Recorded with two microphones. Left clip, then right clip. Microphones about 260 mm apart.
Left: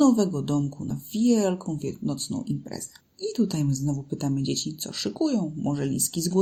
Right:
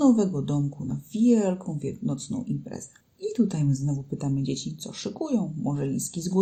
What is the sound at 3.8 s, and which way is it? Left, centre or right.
Speech, left.